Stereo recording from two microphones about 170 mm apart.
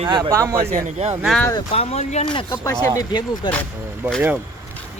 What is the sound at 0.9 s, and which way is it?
Speech, 40° right (ahead or behind).